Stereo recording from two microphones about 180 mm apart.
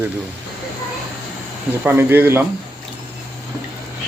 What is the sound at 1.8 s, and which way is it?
Speech, 10° right (ahead or behind).